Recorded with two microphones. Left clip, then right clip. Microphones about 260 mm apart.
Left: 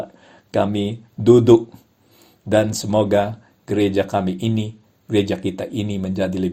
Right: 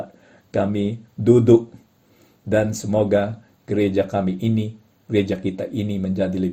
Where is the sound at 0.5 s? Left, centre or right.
Centre.